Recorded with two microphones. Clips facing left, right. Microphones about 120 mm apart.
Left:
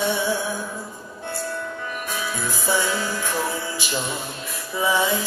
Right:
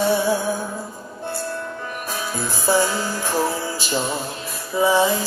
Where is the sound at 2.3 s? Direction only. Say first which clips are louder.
Right 5 dB; 35° right (ahead or behind).